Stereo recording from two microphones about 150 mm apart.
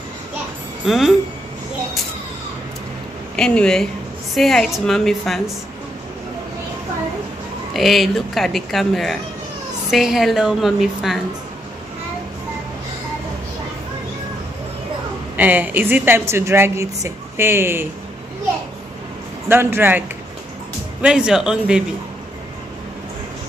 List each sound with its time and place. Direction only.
0.8 s speech: centre (ahead or behind)
3.3 s speech: 5° left (ahead or behind)
7.7 s speech: centre (ahead or behind)
15.3 s a woman's voice: 10° right (ahead or behind)
19.5 s a woman's voice: 15° right (ahead or behind)
21.0 s speech: 5° right (ahead or behind)